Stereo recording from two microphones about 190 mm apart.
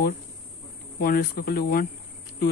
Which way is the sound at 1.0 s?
50° left (ahead or behind).